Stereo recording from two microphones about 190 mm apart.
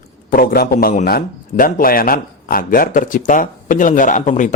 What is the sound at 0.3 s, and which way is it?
A man's voice, 50° left (ahead or behind).